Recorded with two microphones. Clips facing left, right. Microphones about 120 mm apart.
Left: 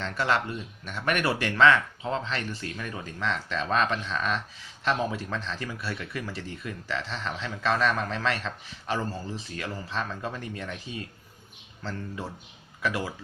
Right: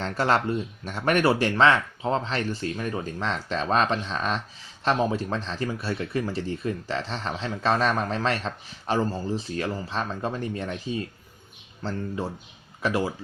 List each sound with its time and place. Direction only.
0.0 s speech: 35° right (ahead or behind)